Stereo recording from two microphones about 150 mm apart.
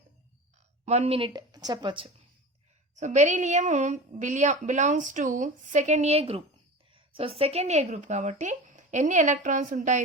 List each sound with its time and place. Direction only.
0.9 s a woman's voice: 45° right (ahead or behind)
3.0 s speech: 50° right (ahead or behind)